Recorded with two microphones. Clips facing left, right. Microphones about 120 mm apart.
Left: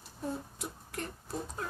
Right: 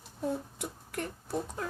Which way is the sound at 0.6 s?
70° right (ahead or behind).